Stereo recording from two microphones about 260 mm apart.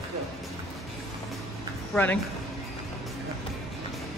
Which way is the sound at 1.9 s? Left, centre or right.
Centre.